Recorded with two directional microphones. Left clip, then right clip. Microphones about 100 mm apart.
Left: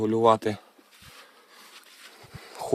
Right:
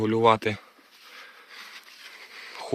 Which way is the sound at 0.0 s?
45° left (ahead or behind).